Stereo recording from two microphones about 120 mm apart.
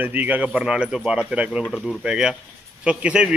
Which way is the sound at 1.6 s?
5° left (ahead or behind).